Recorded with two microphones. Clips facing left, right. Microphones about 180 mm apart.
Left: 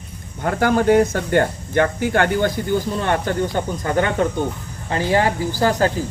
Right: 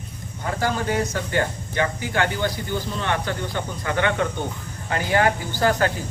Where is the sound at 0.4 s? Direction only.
55° left (ahead or behind).